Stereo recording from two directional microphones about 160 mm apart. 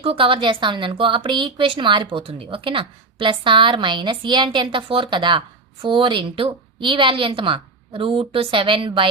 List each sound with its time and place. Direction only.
0.0 s a woman's voice: 35° right (ahead or behind)